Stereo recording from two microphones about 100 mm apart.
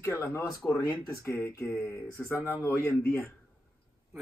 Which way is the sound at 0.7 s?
30° left (ahead or behind).